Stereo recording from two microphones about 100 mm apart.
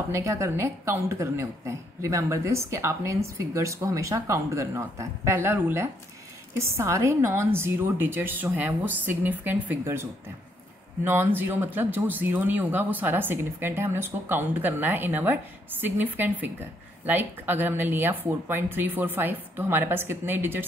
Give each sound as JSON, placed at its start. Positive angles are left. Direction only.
{"t": 0.1, "sound": "speech", "side_deg": -30}
{"t": 11.1, "sound": "speech", "side_deg": -20}